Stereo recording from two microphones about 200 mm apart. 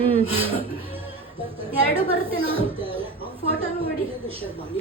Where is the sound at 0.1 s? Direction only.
25° right (ahead or behind).